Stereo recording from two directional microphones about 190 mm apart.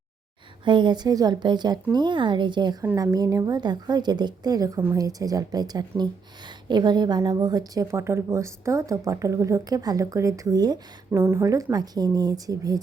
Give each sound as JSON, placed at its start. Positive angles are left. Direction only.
{"t": 0.6, "sound": "a woman's voice", "side_deg": -25}